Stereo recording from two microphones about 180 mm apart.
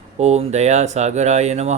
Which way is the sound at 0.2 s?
40° right (ahead or behind).